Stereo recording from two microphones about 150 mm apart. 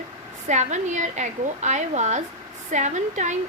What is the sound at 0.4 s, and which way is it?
A woman's voice, 50° right (ahead or behind).